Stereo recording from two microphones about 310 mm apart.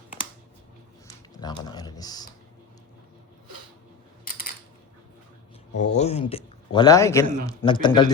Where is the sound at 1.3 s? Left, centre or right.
Centre.